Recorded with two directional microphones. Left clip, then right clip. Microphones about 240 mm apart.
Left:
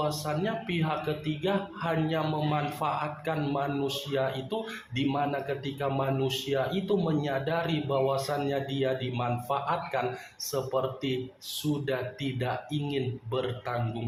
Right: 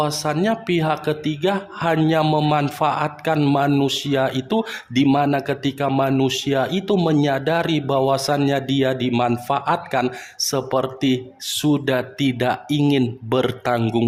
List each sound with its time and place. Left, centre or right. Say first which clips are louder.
0.0 s speech: right 9 dB; right